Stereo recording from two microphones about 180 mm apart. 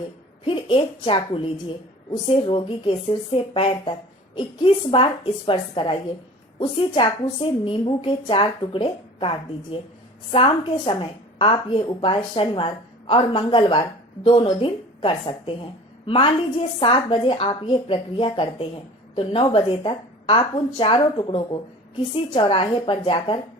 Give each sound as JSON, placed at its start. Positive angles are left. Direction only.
{"t": 0.4, "sound": "a woman's voice", "side_deg": 30}
{"t": 10.3, "sound": "a woman's voice", "side_deg": 30}